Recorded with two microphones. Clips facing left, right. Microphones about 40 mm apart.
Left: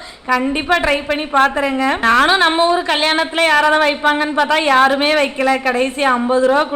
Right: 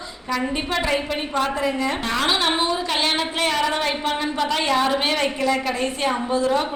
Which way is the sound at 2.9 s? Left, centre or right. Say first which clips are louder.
Left 6 dB; left.